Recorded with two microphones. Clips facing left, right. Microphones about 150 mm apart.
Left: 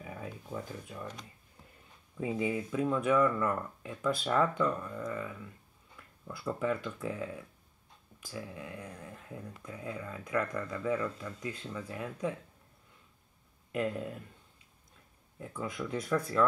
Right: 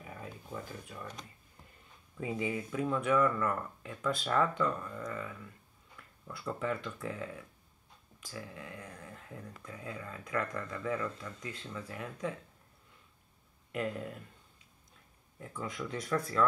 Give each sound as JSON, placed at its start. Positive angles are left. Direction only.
{"t": 0.0, "sound": "a sound", "side_deg": 20}
{"t": 2.1, "sound": "speech", "side_deg": 20}
{"t": 13.7, "sound": "speech", "side_deg": 20}
{"t": 15.3, "sound": "speech", "side_deg": 20}